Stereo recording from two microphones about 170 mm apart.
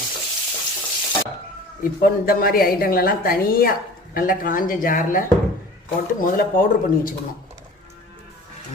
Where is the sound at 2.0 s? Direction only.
60° left (ahead or behind).